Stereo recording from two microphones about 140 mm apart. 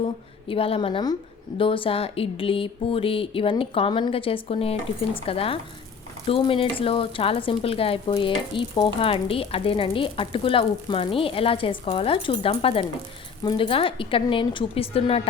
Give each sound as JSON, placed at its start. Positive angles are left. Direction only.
{"t": 0.0, "sound": "a woman's voice", "side_deg": 40}